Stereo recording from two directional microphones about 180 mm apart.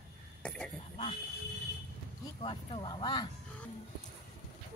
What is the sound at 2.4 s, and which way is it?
Speech, 25° left (ahead or behind).